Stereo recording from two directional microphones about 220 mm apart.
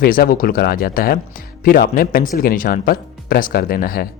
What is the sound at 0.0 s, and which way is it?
Speech, 40° left (ahead or behind).